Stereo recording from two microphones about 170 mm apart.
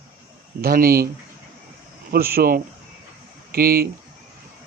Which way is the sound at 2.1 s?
60° right (ahead or behind).